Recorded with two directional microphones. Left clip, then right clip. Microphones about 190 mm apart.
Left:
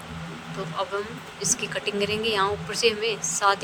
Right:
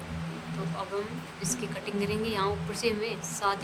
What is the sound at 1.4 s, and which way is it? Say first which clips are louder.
A woman's voice: left 8 dB; 15° left (ahead or behind).